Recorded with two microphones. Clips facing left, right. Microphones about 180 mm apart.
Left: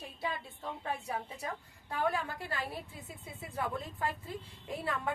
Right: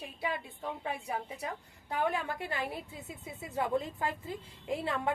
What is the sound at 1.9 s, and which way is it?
A woman's voice, 20° right (ahead or behind).